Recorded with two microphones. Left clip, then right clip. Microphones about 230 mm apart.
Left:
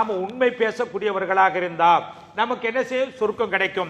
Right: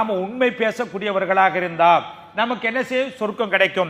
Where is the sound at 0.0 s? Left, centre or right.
Right.